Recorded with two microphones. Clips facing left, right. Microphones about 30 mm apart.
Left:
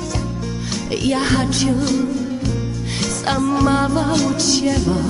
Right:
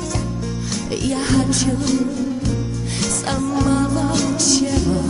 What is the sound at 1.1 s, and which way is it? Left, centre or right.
Music, left.